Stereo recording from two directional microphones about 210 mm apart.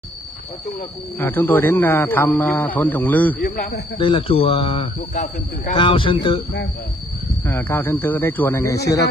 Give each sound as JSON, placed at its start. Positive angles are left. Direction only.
{"t": 0.7, "sound": "speech", "side_deg": 10}
{"t": 3.3, "sound": "speech", "side_deg": 45}
{"t": 4.0, "sound": "a man's voice", "side_deg": 25}
{"t": 7.4, "sound": "speech", "side_deg": 10}